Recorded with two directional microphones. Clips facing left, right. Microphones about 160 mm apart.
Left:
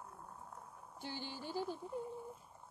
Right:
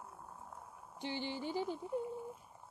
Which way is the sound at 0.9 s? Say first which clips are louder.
Right 6 dB; 15° right (ahead or behind).